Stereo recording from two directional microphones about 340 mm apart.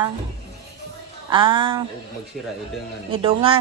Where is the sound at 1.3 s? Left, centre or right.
Centre.